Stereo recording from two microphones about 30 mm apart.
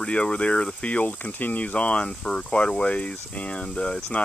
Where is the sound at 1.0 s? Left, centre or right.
Left.